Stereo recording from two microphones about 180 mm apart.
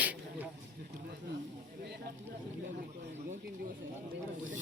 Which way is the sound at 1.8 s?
65° right (ahead or behind).